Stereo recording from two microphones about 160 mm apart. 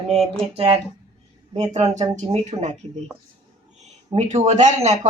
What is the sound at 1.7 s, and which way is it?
Speech, 45° right (ahead or behind).